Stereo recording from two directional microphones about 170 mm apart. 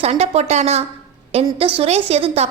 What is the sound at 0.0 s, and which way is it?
A woman's voice, 40° right (ahead or behind).